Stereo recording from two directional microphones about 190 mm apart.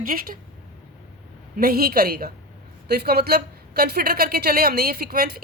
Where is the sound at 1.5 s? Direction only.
50° right (ahead or behind).